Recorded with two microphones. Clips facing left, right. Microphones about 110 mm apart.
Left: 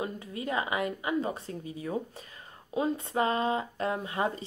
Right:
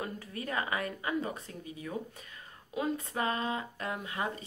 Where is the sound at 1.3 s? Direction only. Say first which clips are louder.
Left 5 dB; 30° left (ahead or behind).